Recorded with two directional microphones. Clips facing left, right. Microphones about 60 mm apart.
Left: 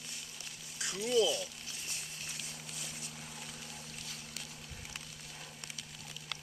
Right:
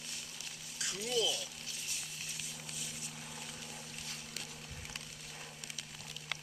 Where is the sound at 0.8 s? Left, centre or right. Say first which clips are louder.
Left 5 dB; left.